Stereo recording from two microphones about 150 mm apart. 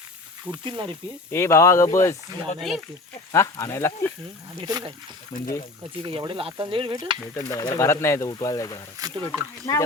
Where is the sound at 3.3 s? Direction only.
20° left (ahead or behind).